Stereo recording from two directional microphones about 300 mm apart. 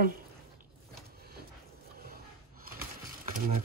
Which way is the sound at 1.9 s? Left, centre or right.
Right.